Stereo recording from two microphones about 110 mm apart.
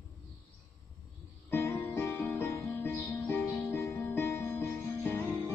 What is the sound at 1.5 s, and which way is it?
Music, 20° left (ahead or behind).